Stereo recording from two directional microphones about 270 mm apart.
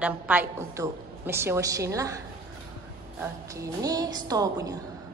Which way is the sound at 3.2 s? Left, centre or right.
Centre.